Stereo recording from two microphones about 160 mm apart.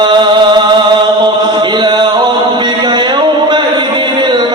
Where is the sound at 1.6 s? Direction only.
30° right (ahead or behind).